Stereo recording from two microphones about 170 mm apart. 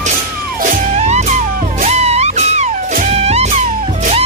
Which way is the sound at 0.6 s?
50° right (ahead or behind).